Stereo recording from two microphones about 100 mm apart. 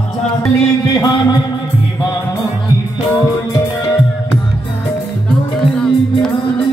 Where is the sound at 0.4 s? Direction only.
35° left (ahead or behind).